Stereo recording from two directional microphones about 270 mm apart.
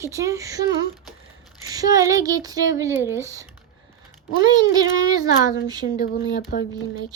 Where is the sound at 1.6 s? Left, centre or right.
Centre.